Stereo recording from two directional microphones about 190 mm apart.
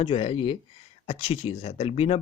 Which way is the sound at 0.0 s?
30° left (ahead or behind).